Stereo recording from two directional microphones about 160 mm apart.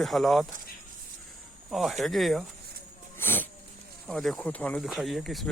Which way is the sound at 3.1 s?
15° left (ahead or behind).